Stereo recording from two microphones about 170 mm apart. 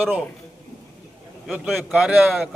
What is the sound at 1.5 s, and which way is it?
A man's voice, centre (ahead or behind).